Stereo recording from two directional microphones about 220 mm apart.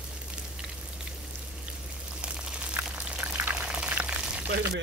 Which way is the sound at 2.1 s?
5° right (ahead or behind).